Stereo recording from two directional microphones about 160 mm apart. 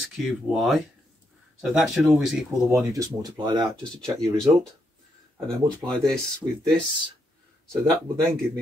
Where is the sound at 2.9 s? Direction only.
25° right (ahead or behind).